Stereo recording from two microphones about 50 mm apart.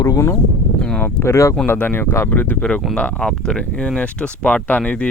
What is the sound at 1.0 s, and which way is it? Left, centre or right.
Speech, left.